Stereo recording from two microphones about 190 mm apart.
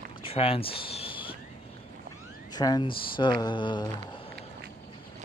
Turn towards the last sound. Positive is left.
turn(degrees=25)  # may be behind; listen again after turning